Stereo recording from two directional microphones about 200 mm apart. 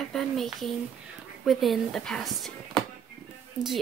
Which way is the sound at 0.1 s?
Centre (ahead or behind).